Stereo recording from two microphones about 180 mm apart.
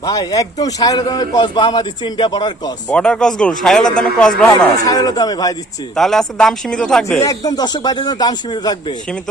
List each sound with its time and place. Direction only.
0.0 s a man's voice: 20° left (ahead or behind)
2.9 s speech: 5° left (ahead or behind)
4.9 s a man's voice: 20° left (ahead or behind)
6.0 s speech: centre (ahead or behind)
7.3 s a man's voice: 20° left (ahead or behind)